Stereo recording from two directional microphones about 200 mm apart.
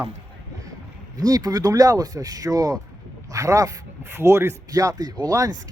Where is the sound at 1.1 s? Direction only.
20° right (ahead or behind).